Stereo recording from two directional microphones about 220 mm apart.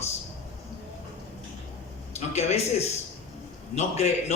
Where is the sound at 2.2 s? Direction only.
30° left (ahead or behind).